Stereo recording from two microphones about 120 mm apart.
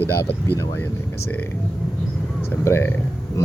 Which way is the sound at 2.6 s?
20° left (ahead or behind).